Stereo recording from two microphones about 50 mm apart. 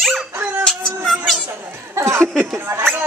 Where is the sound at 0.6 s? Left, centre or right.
Centre.